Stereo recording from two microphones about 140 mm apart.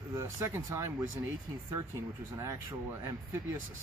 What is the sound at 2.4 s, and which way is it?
Speech, 20° right (ahead or behind).